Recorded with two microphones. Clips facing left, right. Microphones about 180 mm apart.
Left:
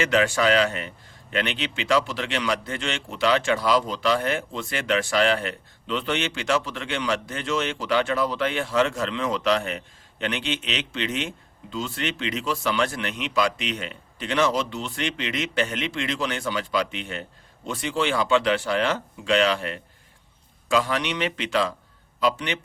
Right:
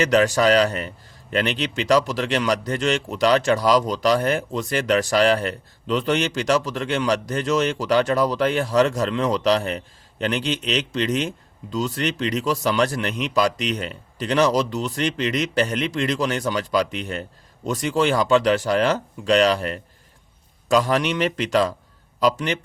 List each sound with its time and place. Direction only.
0.0 s a man's voice: 40° right (ahead or behind)